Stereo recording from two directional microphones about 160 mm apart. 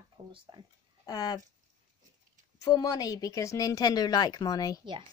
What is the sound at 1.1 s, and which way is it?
Speech, 25° left (ahead or behind).